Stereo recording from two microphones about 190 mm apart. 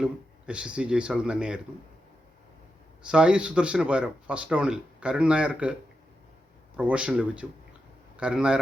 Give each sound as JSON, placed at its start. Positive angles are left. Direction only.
{"t": 0.0, "sound": "speech", "side_deg": -5}
{"t": 3.0, "sound": "speech", "side_deg": -5}
{"t": 6.7, "sound": "speech", "side_deg": -5}